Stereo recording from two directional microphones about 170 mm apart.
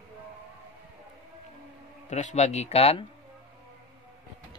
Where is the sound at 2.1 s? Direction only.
45° left (ahead or behind).